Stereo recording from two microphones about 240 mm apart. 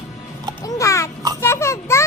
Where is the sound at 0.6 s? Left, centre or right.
Centre.